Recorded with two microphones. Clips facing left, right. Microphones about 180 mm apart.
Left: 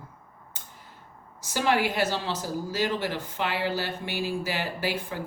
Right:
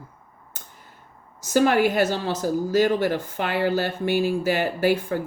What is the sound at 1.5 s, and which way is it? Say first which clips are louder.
A woman's voice: right 7 dB; 50° right (ahead or behind).